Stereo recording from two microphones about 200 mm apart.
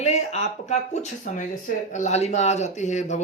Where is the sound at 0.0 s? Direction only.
35° left (ahead or behind).